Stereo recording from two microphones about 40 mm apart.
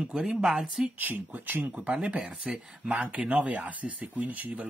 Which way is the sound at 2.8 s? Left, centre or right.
Right.